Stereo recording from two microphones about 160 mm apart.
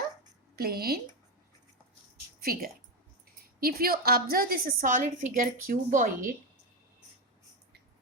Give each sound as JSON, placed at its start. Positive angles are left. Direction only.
{"t": 0.5, "sound": "speech", "side_deg": -70}
{"t": 2.4, "sound": "a woman's voice", "side_deg": -70}